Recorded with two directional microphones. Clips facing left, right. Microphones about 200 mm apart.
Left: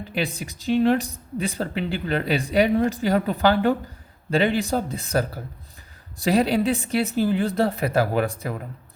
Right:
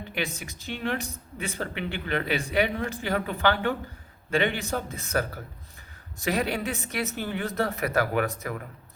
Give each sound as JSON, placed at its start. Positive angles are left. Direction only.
{"t": 0.1, "sound": "speech", "side_deg": 35}